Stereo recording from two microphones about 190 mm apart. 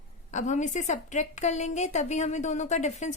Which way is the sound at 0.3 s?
40° left (ahead or behind).